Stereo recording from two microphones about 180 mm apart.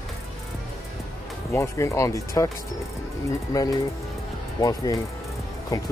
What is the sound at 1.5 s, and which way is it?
Speech, 15° left (ahead or behind).